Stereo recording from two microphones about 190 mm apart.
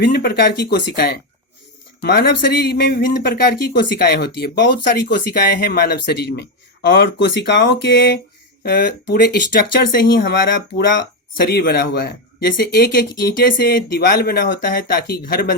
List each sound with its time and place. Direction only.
0.0 s speech: 55° left (ahead or behind)
11.3 s speech: 55° left (ahead or behind)